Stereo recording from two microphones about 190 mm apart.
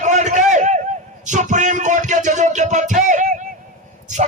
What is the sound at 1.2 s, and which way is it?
Music, 40° right (ahead or behind).